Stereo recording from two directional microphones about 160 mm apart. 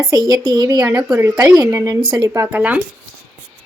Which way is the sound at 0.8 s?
10° right (ahead or behind).